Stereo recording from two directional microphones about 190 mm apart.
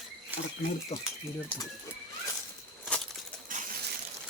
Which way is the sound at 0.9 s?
35° left (ahead or behind).